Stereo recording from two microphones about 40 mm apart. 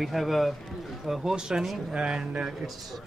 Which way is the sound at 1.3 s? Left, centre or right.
Centre.